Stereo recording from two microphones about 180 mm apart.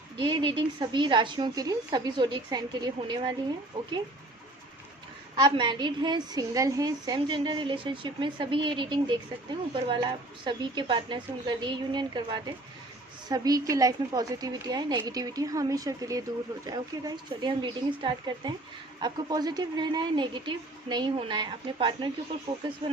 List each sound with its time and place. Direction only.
0.2 s a woman's voice: 25° right (ahead or behind)
5.4 s a woman's voice: 25° right (ahead or behind)